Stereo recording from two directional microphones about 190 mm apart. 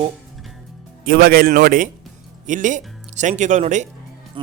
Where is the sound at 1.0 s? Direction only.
50° right (ahead or behind).